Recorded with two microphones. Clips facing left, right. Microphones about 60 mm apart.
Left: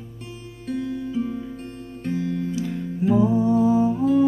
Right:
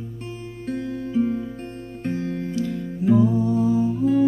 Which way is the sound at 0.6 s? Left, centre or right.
Right.